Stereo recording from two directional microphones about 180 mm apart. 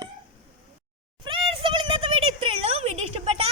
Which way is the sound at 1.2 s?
30° right (ahead or behind).